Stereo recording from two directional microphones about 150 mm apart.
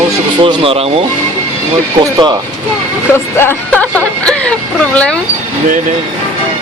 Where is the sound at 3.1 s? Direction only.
15° left (ahead or behind).